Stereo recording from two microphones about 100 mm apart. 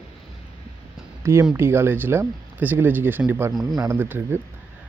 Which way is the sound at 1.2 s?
25° right (ahead or behind).